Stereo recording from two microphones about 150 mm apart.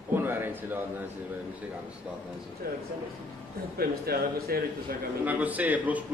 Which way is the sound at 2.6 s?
90° right.